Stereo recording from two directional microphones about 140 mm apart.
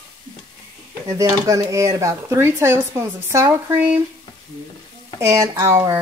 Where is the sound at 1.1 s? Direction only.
25° right (ahead or behind).